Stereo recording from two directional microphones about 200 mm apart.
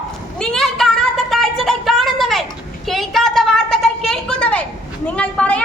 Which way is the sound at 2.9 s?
Centre (ahead or behind).